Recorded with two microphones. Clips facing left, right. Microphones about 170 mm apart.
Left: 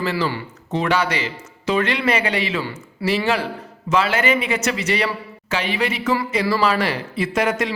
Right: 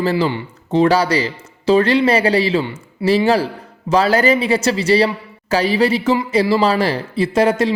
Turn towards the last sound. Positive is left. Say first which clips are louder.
# right 6 dB
turn(degrees=-30)  # may be behind; listen again after turning